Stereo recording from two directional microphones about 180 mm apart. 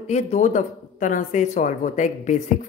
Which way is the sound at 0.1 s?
40° left (ahead or behind).